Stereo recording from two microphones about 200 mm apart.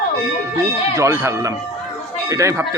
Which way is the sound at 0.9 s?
15° right (ahead or behind).